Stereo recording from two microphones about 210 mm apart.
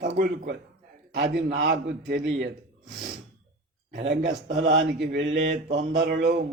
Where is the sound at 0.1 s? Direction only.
45° right (ahead or behind).